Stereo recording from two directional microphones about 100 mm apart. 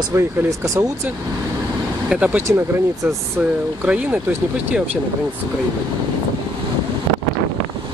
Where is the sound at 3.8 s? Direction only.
15° right (ahead or behind).